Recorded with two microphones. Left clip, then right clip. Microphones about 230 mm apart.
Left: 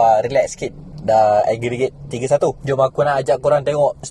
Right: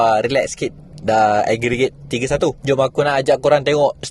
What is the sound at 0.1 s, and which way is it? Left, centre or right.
Speech, right.